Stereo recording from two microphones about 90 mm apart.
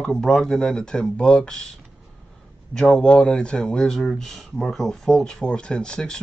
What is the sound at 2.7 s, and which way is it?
Speech, 5° left (ahead or behind).